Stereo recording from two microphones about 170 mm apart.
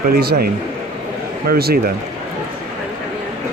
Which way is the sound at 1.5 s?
65° right (ahead or behind).